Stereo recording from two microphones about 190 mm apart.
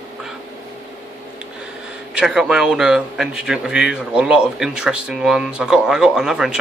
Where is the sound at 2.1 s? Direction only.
5° right (ahead or behind).